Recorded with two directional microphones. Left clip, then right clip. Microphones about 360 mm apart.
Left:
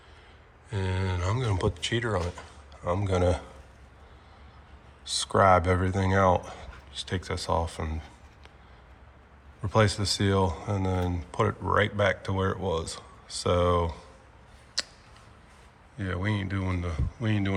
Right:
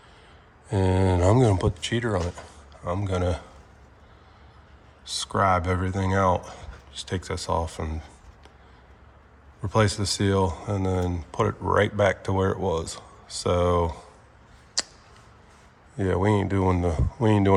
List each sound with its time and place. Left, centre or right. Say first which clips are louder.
0.7 s speech: right 10 dB; centre
5.0 s speech: left 1 dB; centre
9.6 s speech: right 1 dB; centre
14.8 s a sound: right 3 dB; right
16.0 s speech: right 9 dB; right